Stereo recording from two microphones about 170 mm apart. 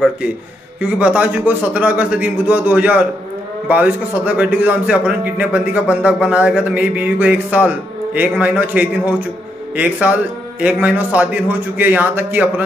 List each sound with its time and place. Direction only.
0.7 s a man's voice: 10° right (ahead or behind)